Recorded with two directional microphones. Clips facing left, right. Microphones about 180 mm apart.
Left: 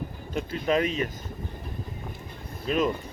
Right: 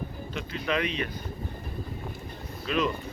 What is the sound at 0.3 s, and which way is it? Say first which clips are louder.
Speech: left 5 dB; 45° left (ahead or behind).